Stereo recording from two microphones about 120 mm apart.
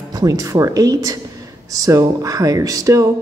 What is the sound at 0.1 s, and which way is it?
A woman's voice, 30° right (ahead or behind).